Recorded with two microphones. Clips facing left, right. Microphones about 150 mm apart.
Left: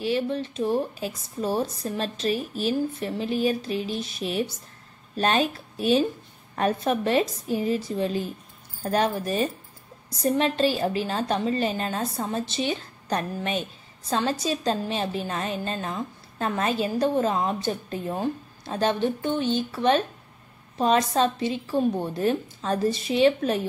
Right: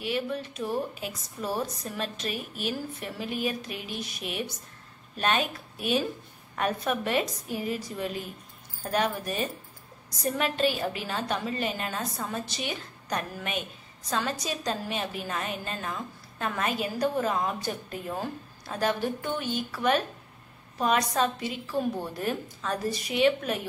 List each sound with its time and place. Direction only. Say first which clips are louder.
0.0 s a woman's voice: left 5 dB; 30° left (ahead or behind)